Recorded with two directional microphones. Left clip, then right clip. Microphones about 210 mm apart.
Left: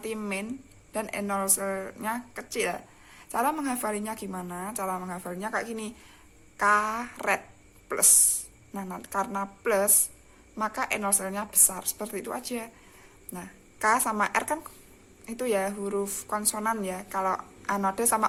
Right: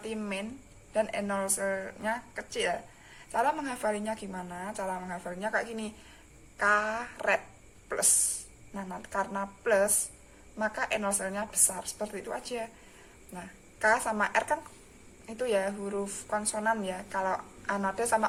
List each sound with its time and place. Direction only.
0.0 s speech: 45° left (ahead or behind)
8.7 s a woman's voice: 45° left (ahead or behind)